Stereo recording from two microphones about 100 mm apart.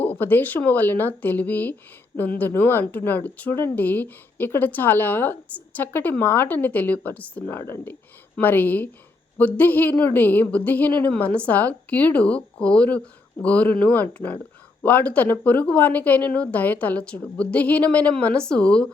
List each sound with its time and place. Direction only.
0.0 s a woman's voice: 20° left (ahead or behind)